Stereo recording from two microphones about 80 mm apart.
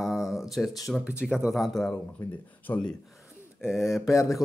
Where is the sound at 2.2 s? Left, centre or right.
Left.